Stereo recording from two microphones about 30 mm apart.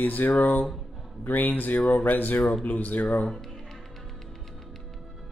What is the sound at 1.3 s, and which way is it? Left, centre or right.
Speech, left.